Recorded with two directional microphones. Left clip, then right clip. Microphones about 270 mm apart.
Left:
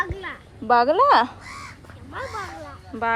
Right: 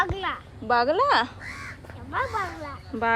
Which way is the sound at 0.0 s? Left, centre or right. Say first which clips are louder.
Right 2 dB; centre.